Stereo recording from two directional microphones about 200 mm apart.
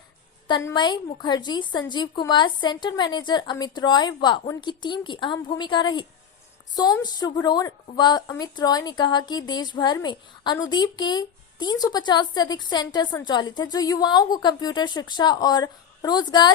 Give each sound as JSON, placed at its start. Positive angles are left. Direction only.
{"t": 0.4, "sound": "a woman's voice", "side_deg": 20}